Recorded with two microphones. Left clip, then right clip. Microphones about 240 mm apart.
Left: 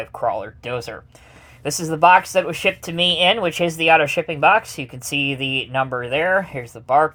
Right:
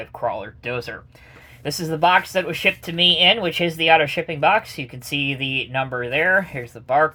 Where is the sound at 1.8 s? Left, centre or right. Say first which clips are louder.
Left 4 dB; left.